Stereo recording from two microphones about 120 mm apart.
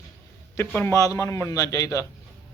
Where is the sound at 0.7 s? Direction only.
15° left (ahead or behind).